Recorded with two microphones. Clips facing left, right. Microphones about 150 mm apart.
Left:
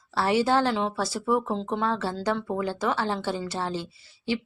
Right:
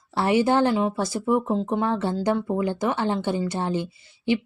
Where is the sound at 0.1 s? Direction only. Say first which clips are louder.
Right 2 dB; 20° right (ahead or behind).